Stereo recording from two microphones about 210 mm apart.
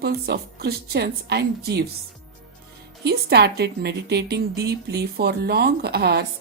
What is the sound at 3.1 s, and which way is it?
A woman's voice, 50° right (ahead or behind).